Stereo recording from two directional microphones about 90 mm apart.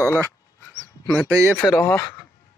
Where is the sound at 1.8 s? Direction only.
25° left (ahead or behind).